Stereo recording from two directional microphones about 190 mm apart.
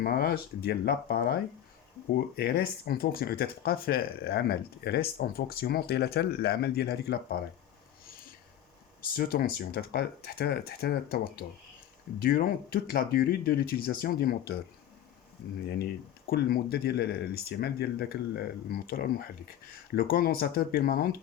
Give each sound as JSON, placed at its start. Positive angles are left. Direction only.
{"t": 0.0, "sound": "speech", "side_deg": 55}
{"t": 9.1, "sound": "speech", "side_deg": 50}
{"t": 12.2, "sound": "speech", "side_deg": 50}
{"t": 15.6, "sound": "speech", "side_deg": 60}